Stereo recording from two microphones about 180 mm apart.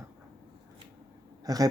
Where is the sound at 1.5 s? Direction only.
20° right (ahead or behind).